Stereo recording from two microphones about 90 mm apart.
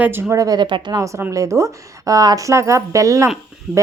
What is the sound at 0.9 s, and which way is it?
Speech, 35° right (ahead or behind).